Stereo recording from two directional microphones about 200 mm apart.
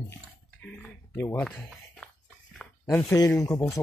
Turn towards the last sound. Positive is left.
turn(degrees=15)  # may be behind; listen again after turning